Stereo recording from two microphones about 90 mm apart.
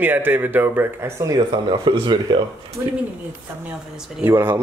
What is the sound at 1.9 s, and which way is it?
Speech, 55° right (ahead or behind).